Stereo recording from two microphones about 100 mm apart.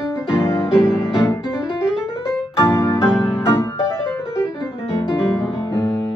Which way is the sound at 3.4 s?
25° left (ahead or behind).